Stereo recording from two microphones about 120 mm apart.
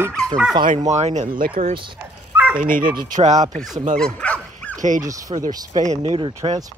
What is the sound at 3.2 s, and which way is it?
Speech, 85° right.